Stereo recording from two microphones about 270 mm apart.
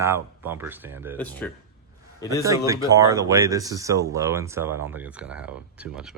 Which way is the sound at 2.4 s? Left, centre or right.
Centre.